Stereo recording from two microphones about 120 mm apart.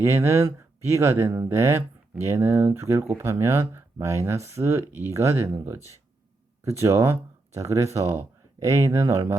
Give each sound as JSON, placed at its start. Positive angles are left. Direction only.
{"t": 0.0, "sound": "speech", "side_deg": -20}